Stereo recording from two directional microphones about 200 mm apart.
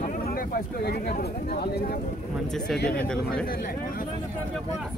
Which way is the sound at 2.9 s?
5° left (ahead or behind).